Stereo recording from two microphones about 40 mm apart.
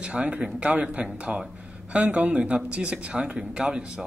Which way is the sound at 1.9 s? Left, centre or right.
Right.